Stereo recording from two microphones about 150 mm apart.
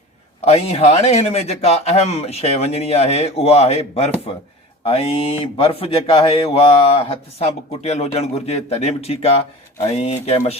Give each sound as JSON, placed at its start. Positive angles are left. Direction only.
{"t": 0.4, "sound": "a man's voice", "side_deg": 45}